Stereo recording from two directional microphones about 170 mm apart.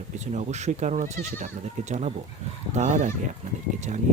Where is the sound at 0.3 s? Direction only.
45° right (ahead or behind).